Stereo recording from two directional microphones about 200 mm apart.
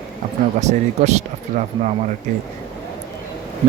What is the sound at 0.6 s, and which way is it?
Speech, 35° right (ahead or behind).